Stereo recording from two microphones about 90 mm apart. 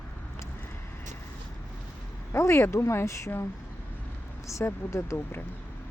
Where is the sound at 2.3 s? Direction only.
30° left (ahead or behind).